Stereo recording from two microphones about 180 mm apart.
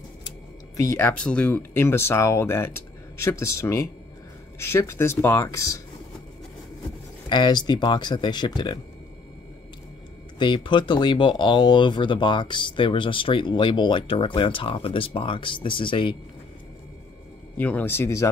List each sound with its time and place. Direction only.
0.7 s speech: 15° left (ahead or behind)
7.2 s speech: 25° left (ahead or behind)
10.4 s speech: 25° left (ahead or behind)
17.6 s speech: 10° left (ahead or behind)